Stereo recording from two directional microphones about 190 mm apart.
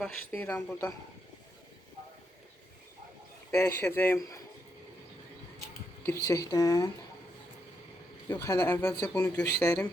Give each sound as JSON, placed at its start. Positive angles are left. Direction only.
{"t": 0.0, "sound": "speech", "side_deg": 5}
{"t": 3.5, "sound": "speech", "side_deg": 15}
{"t": 6.2, "sound": "speech", "side_deg": 15}
{"t": 8.3, "sound": "speech", "side_deg": 10}